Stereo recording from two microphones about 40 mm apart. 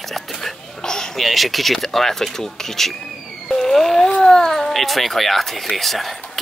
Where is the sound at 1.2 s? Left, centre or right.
Centre.